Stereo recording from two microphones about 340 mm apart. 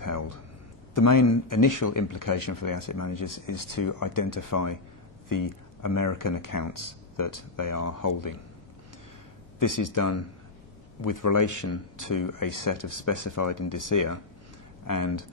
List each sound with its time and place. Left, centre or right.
0.0 s a sound: left
0.9 s speech: left
1.2 s speech: left
9.6 s speech: left